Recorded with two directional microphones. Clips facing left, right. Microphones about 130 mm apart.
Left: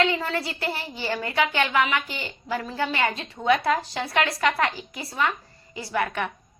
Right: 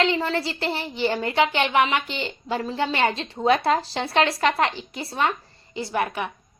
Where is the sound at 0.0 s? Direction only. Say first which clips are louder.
Right 2 dB; 30° right (ahead or behind).